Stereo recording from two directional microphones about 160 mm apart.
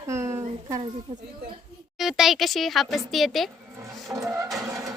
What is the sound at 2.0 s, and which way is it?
A child's voice, centre (ahead or behind).